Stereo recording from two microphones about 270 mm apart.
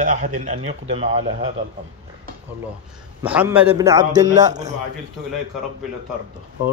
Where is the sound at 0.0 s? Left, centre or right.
Right.